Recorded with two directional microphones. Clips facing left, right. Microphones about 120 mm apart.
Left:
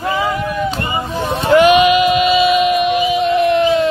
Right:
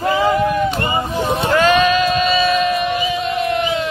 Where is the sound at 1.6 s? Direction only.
15° left (ahead or behind).